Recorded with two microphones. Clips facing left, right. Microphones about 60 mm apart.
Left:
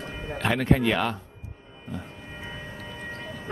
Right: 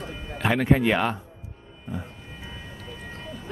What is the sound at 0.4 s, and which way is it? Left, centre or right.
Speech, centre.